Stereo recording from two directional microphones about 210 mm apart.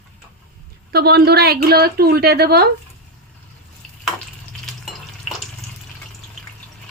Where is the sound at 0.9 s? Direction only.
50° right (ahead or behind).